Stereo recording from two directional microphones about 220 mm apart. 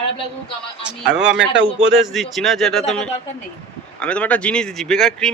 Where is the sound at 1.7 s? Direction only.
Centre (ahead or behind).